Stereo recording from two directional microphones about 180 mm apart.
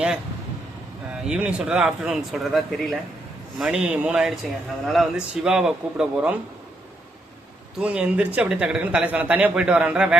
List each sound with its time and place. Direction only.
1.3 s speech: 5° right (ahead or behind)
7.8 s speech: 5° right (ahead or behind)